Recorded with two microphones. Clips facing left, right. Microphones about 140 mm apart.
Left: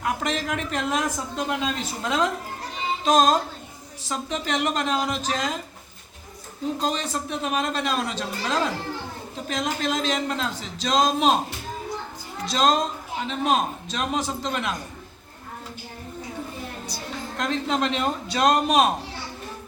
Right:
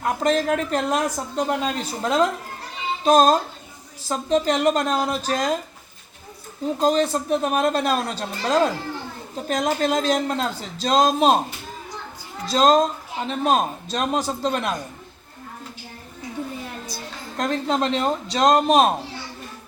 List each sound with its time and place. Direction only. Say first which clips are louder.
0.0 s speech: right 6 dB; 40° right (ahead or behind)
6.7 s speech: right 10 dB; 40° right (ahead or behind)
12.5 s speech: right 5 dB; 40° right (ahead or behind)
17.3 s speech: right 3 dB; 40° right (ahead or behind)